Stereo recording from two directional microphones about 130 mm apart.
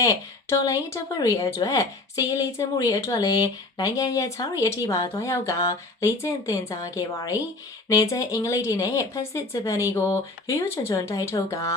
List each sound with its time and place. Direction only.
0.0 s a woman's voice: 25° left (ahead or behind)